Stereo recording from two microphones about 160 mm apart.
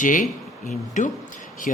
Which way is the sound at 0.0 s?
55° left (ahead or behind).